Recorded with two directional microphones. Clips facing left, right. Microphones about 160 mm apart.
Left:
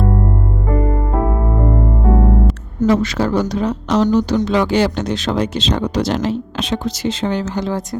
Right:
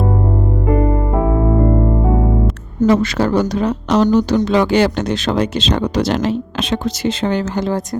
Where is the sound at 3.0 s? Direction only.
60° right (ahead or behind).